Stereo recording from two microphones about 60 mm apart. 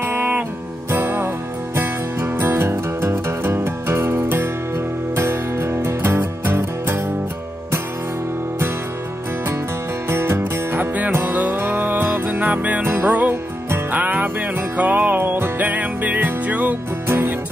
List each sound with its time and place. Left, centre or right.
0.0 s music: right
10.0 s music: right
10.8 s music: right